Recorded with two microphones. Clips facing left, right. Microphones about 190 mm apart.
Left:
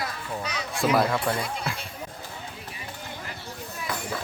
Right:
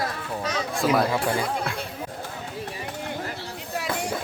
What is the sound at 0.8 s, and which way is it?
Speech, centre (ahead or behind).